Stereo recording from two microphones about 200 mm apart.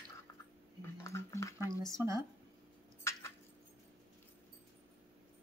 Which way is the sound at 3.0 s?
15° left (ahead or behind).